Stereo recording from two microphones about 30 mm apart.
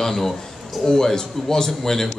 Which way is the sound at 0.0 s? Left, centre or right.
Centre.